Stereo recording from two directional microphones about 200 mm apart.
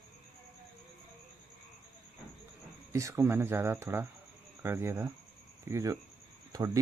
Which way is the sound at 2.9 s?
15° right (ahead or behind).